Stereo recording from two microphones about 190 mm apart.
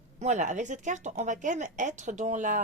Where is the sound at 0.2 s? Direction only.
40° right (ahead or behind).